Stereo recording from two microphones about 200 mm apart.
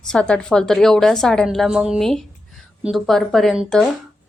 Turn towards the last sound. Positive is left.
turn(degrees=0)  # may be behind; listen again after turning